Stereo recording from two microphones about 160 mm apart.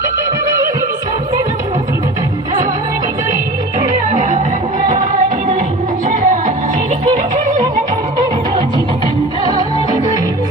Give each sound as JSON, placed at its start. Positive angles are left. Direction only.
{"t": 4.1, "sound": "music", "side_deg": -50}
{"t": 6.1, "sound": "music", "side_deg": -55}
{"t": 9.4, "sound": "music", "side_deg": -25}